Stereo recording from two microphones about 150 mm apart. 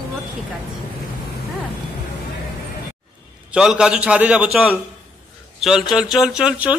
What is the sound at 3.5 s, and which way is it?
Speech, 5° right (ahead or behind).